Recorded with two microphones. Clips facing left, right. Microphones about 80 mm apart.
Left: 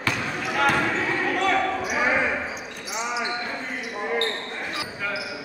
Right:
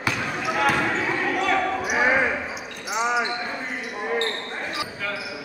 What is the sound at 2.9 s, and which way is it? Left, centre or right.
Basketball bounce, right.